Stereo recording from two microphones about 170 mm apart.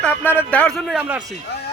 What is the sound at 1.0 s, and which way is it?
Speech, 10° right (ahead or behind).